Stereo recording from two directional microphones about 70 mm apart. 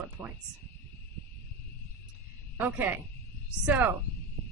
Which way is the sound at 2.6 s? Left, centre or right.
Right.